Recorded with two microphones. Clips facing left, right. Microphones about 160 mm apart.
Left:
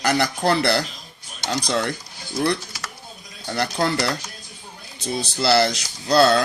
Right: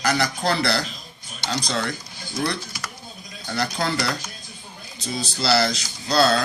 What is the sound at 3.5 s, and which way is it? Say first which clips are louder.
Speech: left 3 dB; 60° left (ahead or behind).